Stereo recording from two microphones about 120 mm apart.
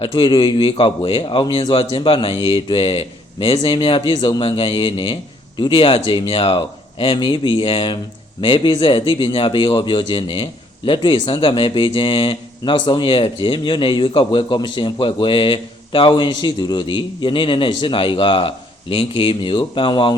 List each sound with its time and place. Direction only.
0.0 s a man's voice: 40° left (ahead or behind)